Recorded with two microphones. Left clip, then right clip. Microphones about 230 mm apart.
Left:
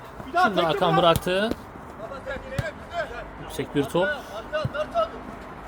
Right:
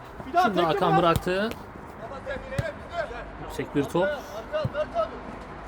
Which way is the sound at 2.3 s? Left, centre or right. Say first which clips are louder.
Right 1 dB; centre.